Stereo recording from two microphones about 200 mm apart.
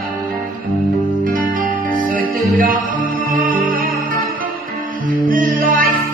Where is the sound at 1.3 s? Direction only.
45° right (ahead or behind).